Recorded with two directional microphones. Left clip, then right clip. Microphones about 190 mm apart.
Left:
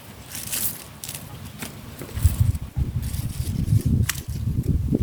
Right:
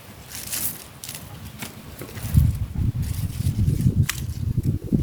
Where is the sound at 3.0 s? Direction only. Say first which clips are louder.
Right 2 dB; 10° left (ahead or behind).